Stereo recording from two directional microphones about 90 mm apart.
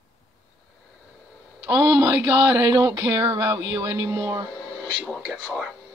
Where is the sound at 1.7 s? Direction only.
40° right (ahead or behind).